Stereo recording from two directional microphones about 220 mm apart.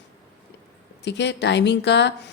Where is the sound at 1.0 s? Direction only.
50° left (ahead or behind).